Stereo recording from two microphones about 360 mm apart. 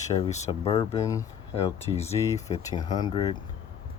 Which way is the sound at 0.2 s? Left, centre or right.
Centre.